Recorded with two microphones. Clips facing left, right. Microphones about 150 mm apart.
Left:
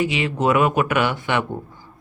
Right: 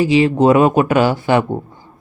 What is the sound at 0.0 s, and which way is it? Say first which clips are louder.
A man's voice: right 9 dB; 35° right (ahead or behind).